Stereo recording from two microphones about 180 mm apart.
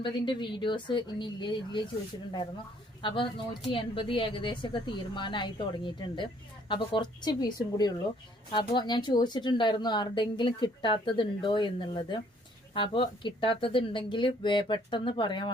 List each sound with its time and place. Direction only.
0.0 s a woman's voice: 25° left (ahead or behind)
3.0 s a woman's voice: 25° left (ahead or behind)